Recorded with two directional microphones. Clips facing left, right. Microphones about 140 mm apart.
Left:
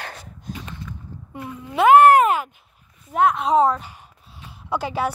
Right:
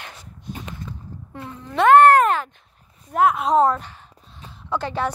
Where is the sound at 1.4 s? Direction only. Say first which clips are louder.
Left 1 dB; 10° left (ahead or behind).